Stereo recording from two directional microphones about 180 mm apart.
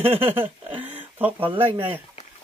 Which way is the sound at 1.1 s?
10° right (ahead or behind).